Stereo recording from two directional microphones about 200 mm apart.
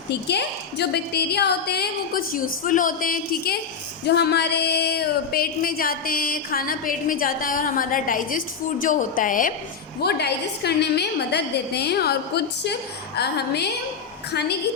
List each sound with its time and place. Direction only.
0.3 s a woman's voice: 55° left (ahead or behind)
10.0 s a woman's voice: 55° left (ahead or behind)